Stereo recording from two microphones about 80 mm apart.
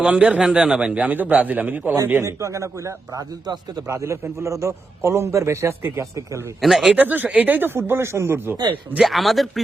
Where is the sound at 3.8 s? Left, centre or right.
Right.